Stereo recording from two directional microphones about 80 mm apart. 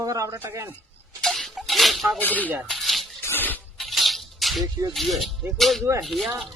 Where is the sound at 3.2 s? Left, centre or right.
Left.